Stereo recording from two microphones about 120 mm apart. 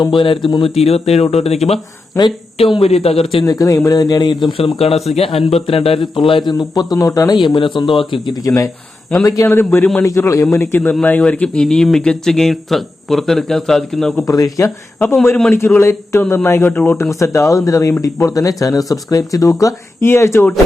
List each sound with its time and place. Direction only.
0.0 s speech: 45° left (ahead or behind)
0.8 s speech: 60° left (ahead or behind)
3.4 s speech: 25° left (ahead or behind)
4.5 s a man's voice: 55° left (ahead or behind); by 9.6 s 25° left (ahead or behind)
9.7 s a man's voice: 10° left (ahead or behind)
10.0 s a man's voice: 25° left (ahead or behind); by 14.3 s 5° left (ahead or behind)
14.3 s a man's voice: 30° left (ahead or behind)
14.9 s a man's voice: 15° left (ahead or behind)